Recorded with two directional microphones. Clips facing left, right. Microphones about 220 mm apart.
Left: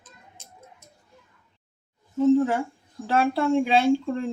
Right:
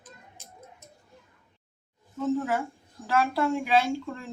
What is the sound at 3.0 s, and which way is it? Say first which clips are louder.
Speech: left 3 dB; 30° left (ahead or behind).